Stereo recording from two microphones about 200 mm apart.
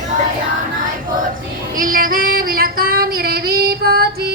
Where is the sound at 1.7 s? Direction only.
45° right (ahead or behind).